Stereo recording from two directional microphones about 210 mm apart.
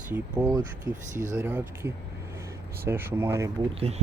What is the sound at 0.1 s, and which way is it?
Speech, 10° right (ahead or behind).